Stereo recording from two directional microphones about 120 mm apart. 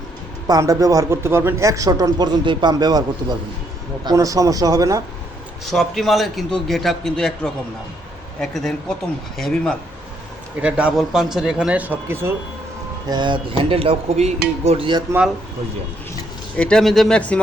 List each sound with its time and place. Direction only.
0.4 s speech: 30° right (ahead or behind)
5.6 s a man's voice: centre (ahead or behind)
10.6 s a man's voice: 10° right (ahead or behind)
13.1 s speech: 40° right (ahead or behind); by 14.8 s 60° right (ahead or behind)
16.6 s speech: 5° left (ahead or behind)